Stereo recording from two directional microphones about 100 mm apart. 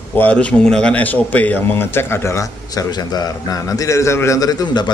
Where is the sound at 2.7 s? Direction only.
45° left (ahead or behind).